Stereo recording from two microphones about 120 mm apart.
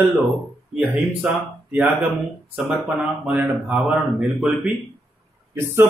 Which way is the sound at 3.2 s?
10° right (ahead or behind).